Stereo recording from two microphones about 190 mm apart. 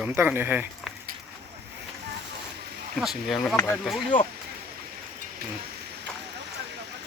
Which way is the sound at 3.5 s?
15° left (ahead or behind).